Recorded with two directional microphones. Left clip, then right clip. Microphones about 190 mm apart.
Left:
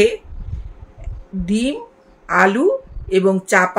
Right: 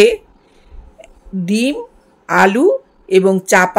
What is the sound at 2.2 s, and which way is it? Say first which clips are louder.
Speech: right 3 dB; 50° right (ahead or behind).